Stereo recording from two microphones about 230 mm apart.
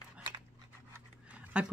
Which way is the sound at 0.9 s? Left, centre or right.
Centre.